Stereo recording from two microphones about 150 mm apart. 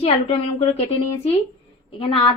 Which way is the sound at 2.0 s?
35° left (ahead or behind).